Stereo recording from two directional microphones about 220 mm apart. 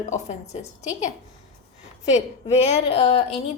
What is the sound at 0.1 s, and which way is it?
A woman's voice, 30° left (ahead or behind).